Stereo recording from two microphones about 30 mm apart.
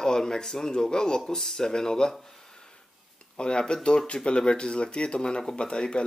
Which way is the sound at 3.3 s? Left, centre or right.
Left.